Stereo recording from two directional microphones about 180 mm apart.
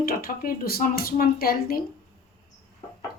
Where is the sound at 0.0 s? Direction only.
55° left (ahead or behind).